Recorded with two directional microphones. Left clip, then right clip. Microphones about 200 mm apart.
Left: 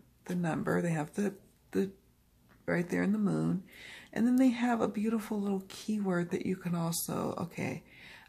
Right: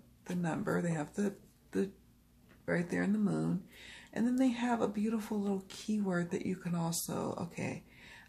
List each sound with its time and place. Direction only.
0.2 s speech: 30° left (ahead or behind)